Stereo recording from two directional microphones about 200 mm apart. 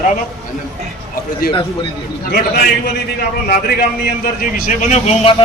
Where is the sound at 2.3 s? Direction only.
55° left (ahead or behind).